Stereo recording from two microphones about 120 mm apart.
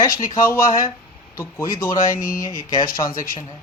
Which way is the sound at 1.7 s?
30° left (ahead or behind).